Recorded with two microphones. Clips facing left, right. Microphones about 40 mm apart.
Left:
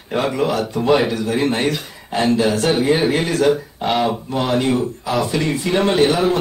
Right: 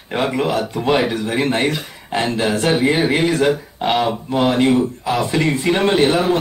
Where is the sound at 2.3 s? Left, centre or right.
Right.